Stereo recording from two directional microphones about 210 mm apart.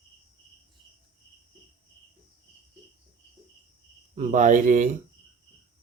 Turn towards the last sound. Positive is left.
turn(degrees=-35)  # may be behind; listen again after turning